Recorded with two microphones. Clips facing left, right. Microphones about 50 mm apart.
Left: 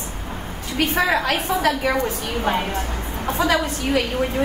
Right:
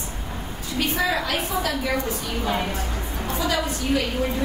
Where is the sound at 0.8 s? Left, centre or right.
Left.